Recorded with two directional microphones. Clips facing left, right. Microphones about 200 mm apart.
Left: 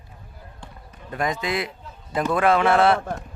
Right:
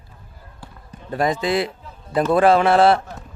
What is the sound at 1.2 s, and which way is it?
A man's voice, 30° right (ahead or behind).